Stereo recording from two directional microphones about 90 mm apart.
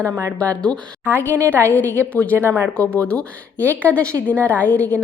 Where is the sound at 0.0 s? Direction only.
35° right (ahead or behind).